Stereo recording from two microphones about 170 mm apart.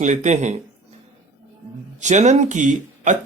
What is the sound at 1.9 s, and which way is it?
Speech, 45° right (ahead or behind).